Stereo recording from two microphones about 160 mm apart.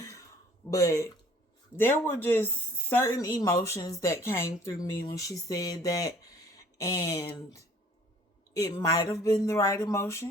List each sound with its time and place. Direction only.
0.7 s speech: 20° left (ahead or behind)
8.5 s speech: 20° left (ahead or behind)